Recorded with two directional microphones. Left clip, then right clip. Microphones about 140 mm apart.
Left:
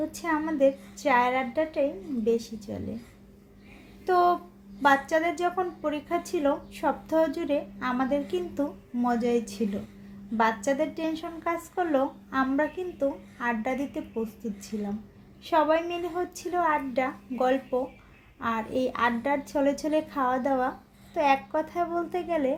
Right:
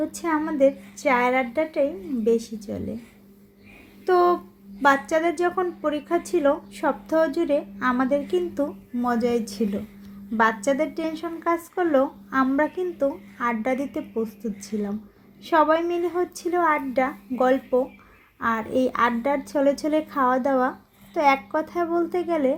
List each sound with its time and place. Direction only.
0.1 s a woman's voice: 15° right (ahead or behind)
4.0 s a woman's voice: 20° right (ahead or behind)
9.0 s speech: 35° right (ahead or behind)
10.3 s a woman's voice: 15° right (ahead or behind)
15.4 s a woman's voice: 20° right (ahead or behind)